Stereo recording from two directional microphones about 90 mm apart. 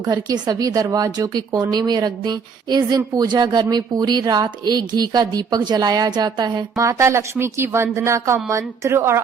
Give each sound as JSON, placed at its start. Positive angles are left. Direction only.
{"t": 0.1, "sound": "speech", "side_deg": -50}
{"t": 6.7, "sound": "speech", "side_deg": -35}